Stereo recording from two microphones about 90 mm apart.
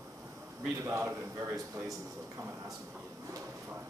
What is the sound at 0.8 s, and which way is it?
A man's voice, 30° right (ahead or behind).